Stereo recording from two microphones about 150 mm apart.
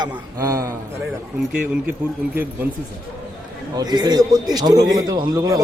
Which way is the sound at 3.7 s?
25° right (ahead or behind).